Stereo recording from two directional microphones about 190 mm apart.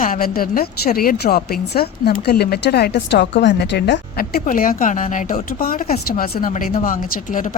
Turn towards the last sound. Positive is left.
turn(degrees=45)  # may be behind; listen again after turning